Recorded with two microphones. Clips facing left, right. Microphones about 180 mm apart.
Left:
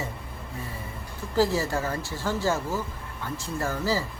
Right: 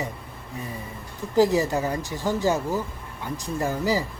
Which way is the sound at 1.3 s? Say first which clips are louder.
Right 4 dB; 15° right (ahead or behind).